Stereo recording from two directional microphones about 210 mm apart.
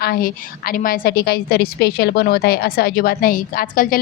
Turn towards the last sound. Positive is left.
turn(degrees=45)  # may be behind; listen again after turning